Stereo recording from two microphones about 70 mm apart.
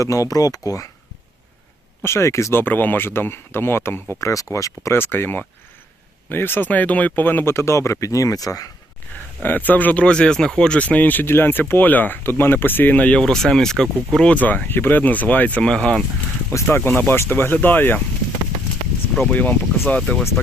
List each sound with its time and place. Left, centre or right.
0.0 s speech: left
2.0 s speech: left
4.2 s speech: left
4.9 s speech: left
9.4 s speech: left
13.2 s speech: centre
14.3 s speech: left
16.5 s speech: left
19.2 s speech: left
20.0 s speech: centre